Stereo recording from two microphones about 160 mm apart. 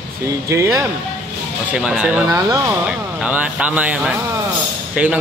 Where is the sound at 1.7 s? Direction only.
5° right (ahead or behind).